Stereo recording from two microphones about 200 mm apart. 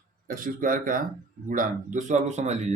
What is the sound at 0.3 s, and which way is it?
Speech, 45° right (ahead or behind).